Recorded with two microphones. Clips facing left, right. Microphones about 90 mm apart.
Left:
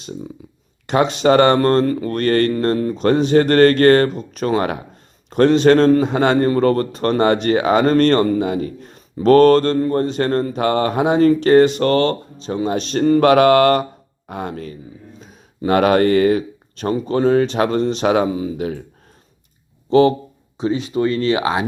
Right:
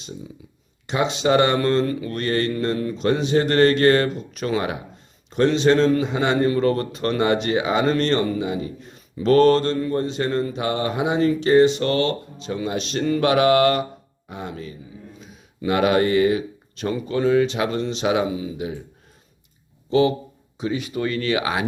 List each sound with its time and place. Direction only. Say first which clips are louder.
0.9 s speech: left 5 dB; 50° left (ahead or behind)
19.9 s speech: left 5 dB; 45° left (ahead or behind)
20.6 s speech: left 6 dB; 30° left (ahead or behind)